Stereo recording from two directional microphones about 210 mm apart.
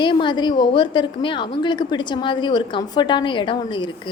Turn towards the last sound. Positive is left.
turn(degrees=25)  # may be behind; listen again after turning